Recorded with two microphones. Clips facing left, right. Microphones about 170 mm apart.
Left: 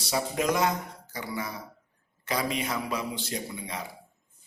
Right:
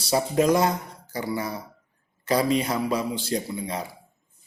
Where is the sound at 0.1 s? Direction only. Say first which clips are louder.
Right 7 dB; 35° right (ahead or behind).